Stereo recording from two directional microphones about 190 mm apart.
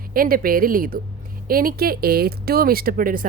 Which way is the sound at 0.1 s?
50° right (ahead or behind).